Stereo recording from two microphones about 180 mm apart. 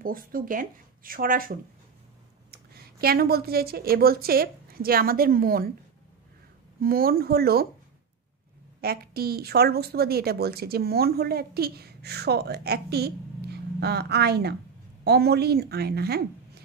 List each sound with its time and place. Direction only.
0.0 s speech: 50° right (ahead or behind)
2.7 s a woman's voice: 55° right (ahead or behind)
6.8 s a woman's voice: 55° right (ahead or behind)
8.8 s a woman's voice: 60° right (ahead or behind)